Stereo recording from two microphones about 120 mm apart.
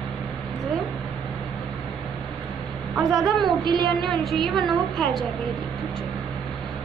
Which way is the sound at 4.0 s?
Centre (ahead or behind).